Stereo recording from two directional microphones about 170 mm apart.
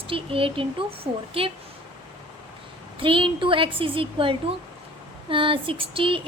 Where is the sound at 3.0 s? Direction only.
30° right (ahead or behind).